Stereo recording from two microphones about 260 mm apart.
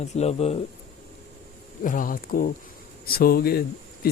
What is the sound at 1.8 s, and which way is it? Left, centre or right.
Speech, left.